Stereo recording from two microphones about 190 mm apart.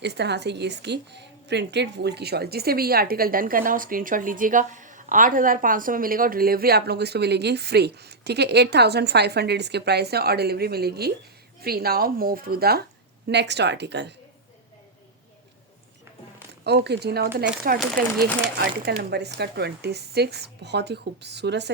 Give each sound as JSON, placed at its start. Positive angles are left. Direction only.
{"t": 0.0, "sound": "a woman's voice", "side_deg": -65}
{"t": 13.2, "sound": "a woman's voice", "side_deg": -65}
{"t": 16.6, "sound": "a woman's voice", "side_deg": -60}
{"t": 17.7, "sound": "speech", "side_deg": -50}
{"t": 18.6, "sound": "a woman's voice", "side_deg": -60}